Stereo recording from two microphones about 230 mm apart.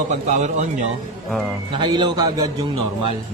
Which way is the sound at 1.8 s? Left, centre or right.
Centre.